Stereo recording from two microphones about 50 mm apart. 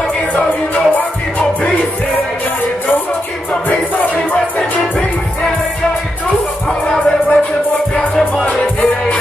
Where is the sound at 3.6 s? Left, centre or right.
Left.